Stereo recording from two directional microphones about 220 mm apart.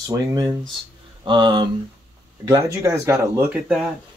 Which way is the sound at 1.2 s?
20° right (ahead or behind).